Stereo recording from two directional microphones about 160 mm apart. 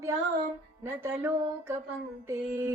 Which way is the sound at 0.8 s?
15° right (ahead or behind).